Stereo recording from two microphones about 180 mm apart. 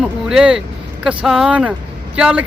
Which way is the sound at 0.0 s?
5° right (ahead or behind).